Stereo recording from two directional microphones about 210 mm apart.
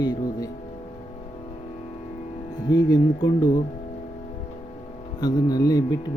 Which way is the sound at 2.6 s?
20° left (ahead or behind).